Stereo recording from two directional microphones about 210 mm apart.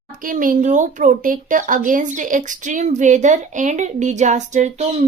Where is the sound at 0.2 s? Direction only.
40° right (ahead or behind).